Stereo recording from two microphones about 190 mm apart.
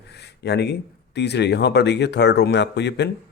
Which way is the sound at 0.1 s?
60° left (ahead or behind).